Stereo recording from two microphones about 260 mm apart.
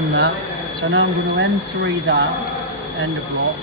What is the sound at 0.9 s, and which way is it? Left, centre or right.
Speech, right.